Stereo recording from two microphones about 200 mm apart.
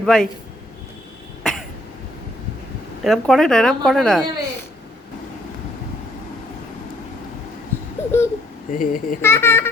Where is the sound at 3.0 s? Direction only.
Centre (ahead or behind).